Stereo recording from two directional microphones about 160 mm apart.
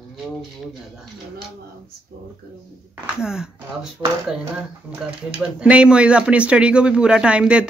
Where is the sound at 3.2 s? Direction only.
5° right (ahead or behind).